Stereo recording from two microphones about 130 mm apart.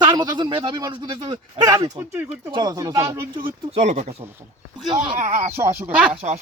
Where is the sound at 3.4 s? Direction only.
45° right (ahead or behind).